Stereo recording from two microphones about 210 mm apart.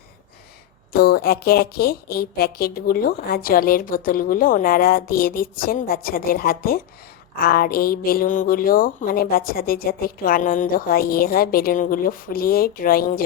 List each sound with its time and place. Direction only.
0.9 s a woman's voice: 45° left (ahead or behind)